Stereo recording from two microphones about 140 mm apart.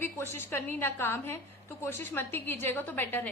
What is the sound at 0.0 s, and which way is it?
A woman's voice, 15° left (ahead or behind).